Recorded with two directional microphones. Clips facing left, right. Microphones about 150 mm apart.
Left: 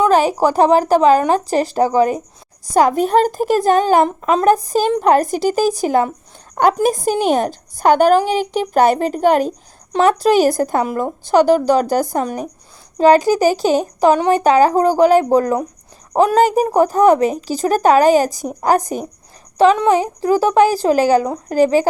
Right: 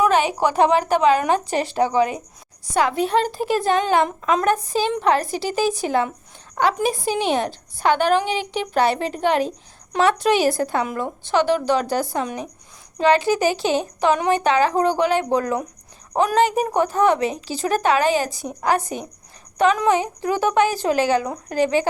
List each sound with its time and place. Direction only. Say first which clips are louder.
0.0 s a woman's voice: left 5 dB; 40° left (ahead or behind)